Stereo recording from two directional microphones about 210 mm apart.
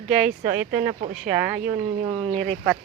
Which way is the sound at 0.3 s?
35° right (ahead or behind).